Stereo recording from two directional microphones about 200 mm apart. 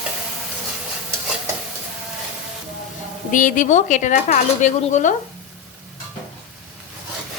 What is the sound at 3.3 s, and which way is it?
Speech, 40° left (ahead or behind).